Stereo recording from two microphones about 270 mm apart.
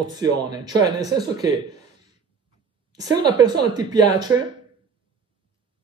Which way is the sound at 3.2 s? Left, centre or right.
Centre.